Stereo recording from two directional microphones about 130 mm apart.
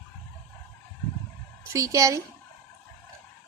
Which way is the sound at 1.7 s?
25° right (ahead or behind).